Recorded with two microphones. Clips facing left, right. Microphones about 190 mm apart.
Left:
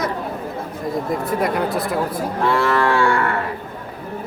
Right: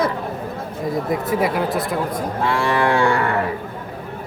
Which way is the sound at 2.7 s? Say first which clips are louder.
Even; 15° right (ahead or behind).